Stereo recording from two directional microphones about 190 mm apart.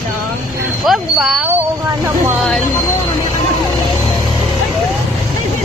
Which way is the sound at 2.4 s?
Centre (ahead or behind).